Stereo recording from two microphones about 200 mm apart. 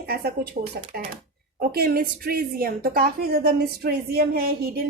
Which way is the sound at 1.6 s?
50° right (ahead or behind).